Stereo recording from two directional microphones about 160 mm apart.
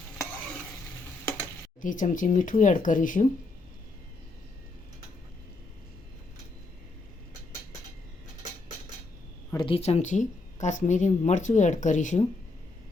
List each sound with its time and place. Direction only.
1.8 s speech: 55° left (ahead or behind)
9.6 s speech: 35° left (ahead or behind); by 12.2 s 50° left (ahead or behind)